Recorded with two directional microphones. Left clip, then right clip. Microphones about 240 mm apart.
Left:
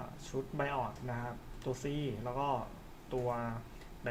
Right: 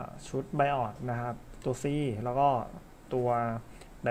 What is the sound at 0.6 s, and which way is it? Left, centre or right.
Speech, right.